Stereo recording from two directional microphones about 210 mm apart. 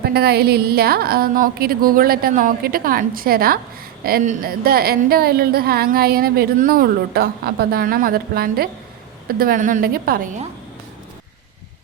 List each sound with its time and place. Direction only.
0.0 s a woman's voice: 50° right (ahead or behind)